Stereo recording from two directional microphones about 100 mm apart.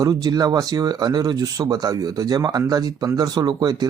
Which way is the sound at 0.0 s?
40° right (ahead or behind).